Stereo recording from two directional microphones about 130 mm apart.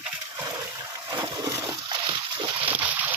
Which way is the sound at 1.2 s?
25° right (ahead or behind).